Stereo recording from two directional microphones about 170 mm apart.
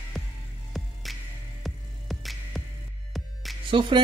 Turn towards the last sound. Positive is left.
turn(degrees=-30)  # may be behind; listen again after turning